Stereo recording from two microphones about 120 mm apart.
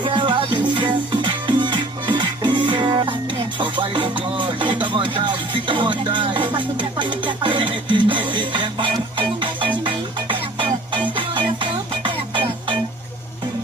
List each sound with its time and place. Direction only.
0.0 s music: 40° right (ahead or behind)